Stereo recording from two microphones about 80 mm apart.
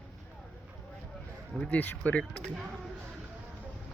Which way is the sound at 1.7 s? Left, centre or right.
Centre.